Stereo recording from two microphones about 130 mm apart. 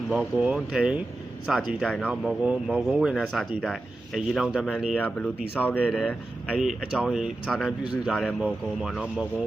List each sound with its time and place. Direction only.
0.1 s speech: 10° right (ahead or behind); by 5.9 s 10° left (ahead or behind)
5.9 s speech: centre (ahead or behind)